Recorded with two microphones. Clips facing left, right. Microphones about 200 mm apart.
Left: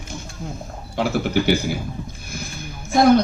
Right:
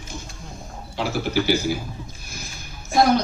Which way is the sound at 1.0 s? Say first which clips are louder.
Left 3 dB; 55° left (ahead or behind).